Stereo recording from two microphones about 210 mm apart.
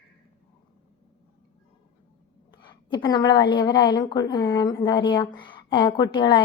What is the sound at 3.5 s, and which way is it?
Speech, 20° left (ahead or behind).